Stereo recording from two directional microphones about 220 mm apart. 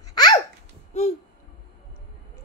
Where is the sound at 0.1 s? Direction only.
20° left (ahead or behind).